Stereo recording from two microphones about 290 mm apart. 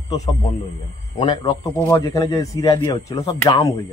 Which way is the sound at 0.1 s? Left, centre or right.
Centre.